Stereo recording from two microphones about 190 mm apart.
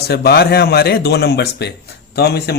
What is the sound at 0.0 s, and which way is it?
Speech, 55° left (ahead or behind).